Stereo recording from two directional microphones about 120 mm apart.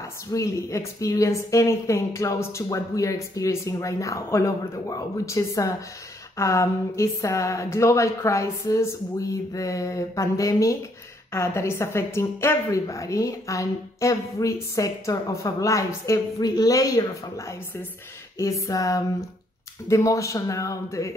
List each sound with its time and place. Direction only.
0.3 s a woman's voice: 25° left (ahead or behind)